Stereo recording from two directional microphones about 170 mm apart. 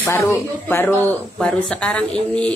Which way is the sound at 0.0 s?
15° left (ahead or behind).